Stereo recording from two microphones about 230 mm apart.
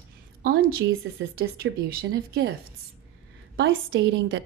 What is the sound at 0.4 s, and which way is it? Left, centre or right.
A woman's voice, right.